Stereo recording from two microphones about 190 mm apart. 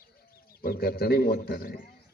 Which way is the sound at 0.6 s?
55° left (ahead or behind).